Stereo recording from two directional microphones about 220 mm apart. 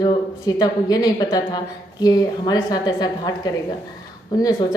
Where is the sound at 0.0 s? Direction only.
20° left (ahead or behind).